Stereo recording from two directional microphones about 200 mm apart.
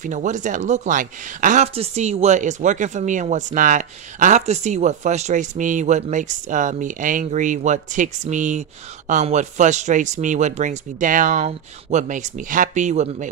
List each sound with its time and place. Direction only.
0.0 s speech: 40° right (ahead or behind)